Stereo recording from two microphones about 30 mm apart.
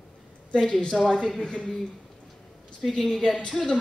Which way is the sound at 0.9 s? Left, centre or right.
Centre.